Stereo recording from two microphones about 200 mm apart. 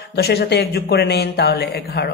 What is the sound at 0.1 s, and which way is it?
Speech, 55° left (ahead or behind).